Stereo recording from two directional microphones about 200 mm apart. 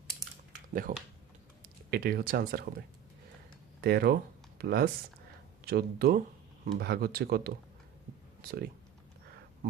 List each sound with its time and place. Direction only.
0.7 s speech: 45° right (ahead or behind)
3.8 s speech: 50° right (ahead or behind)